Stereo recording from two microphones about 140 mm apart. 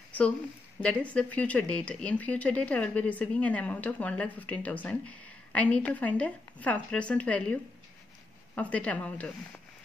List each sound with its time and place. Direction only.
0.7 s speech: 10° left (ahead or behind)